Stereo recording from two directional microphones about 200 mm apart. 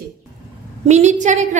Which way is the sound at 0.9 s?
35° right (ahead or behind).